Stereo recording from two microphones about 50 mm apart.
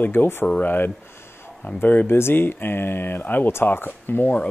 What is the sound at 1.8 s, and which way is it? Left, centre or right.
Speech, left.